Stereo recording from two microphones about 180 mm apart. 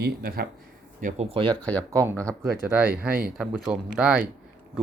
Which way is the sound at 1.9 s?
15° right (ahead or behind).